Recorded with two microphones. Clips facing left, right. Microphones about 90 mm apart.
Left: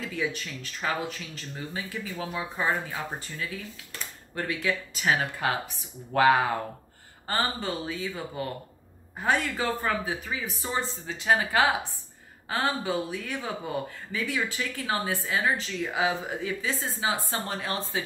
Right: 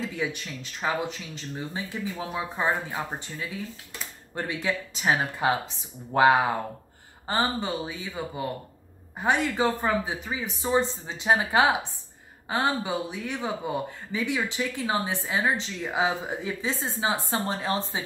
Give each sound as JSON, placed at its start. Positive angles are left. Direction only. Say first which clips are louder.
{"t": 0.2, "sound": "speech", "louder": "even", "side_deg": -20}